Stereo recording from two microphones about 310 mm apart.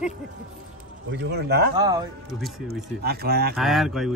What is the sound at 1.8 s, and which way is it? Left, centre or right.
Speech, centre.